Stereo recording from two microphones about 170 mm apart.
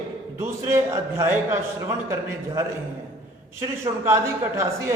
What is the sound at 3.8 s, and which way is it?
Speech, 15° right (ahead or behind).